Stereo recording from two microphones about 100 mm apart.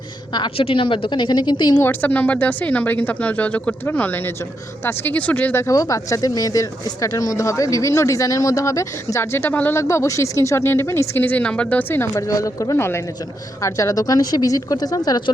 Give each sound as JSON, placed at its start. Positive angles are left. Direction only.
{"t": 0.5, "sound": "speech", "side_deg": 65}
{"t": 1.8, "sound": "speech", "side_deg": 20}
{"t": 5.6, "sound": "speech", "side_deg": 35}
{"t": 9.8, "sound": "speech", "side_deg": 30}
{"t": 12.1, "sound": "speech", "side_deg": 35}